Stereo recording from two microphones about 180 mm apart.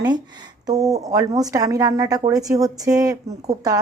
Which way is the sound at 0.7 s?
20° right (ahead or behind).